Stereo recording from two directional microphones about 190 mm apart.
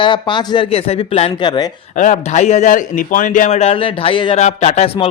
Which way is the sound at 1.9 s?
40° left (ahead or behind).